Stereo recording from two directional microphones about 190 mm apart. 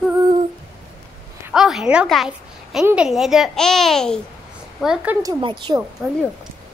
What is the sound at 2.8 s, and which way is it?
A child's voice, 5° right (ahead or behind).